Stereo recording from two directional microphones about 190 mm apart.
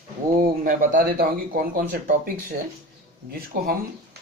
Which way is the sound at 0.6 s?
45° right (ahead or behind).